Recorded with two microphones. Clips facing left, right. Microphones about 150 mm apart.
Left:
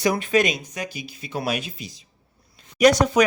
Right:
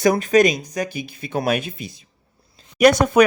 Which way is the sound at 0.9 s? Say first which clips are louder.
Right 5 dB; 55° right (ahead or behind).